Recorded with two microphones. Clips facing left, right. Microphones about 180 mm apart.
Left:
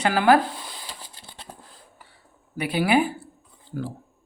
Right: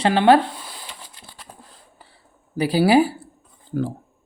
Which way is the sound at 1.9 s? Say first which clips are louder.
Right 1 dB; 30° right (ahead or behind).